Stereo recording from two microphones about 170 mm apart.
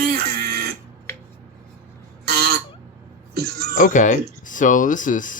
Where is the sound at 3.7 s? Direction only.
50° left (ahead or behind).